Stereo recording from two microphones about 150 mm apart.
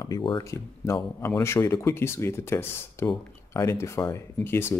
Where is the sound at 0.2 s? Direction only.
30° left (ahead or behind).